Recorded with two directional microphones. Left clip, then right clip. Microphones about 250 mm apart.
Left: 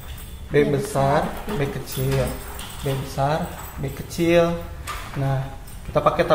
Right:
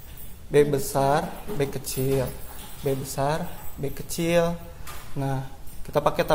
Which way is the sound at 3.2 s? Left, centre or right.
Right.